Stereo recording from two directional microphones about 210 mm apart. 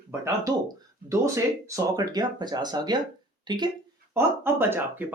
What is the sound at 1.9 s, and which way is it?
Speech, 20° right (ahead or behind).